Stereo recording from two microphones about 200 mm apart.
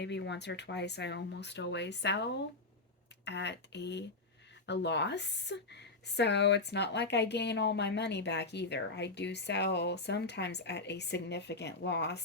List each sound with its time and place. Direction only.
0.0 s a woman's voice: 60° left (ahead or behind)